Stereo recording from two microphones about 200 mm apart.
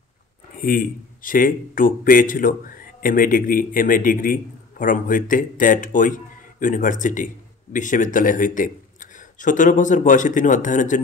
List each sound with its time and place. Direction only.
0.6 s speech: 45° left (ahead or behind)